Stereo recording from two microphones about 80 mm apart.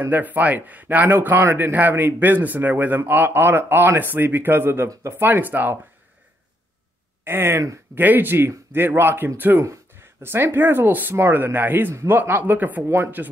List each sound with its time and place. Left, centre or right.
0.0 s speech: right
7.2 s speech: right